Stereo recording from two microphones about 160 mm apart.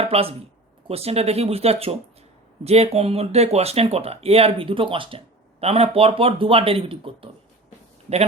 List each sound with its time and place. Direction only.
0.0 s speech: 35° right (ahead or behind)